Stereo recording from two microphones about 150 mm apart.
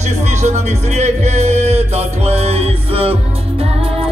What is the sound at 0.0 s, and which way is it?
Music, 50° right (ahead or behind).